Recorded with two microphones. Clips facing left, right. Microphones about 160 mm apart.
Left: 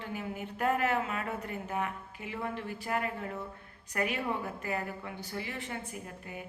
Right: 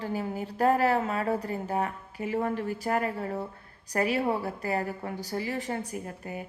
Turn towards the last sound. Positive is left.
turn(degrees=-40)  # may be behind; listen again after turning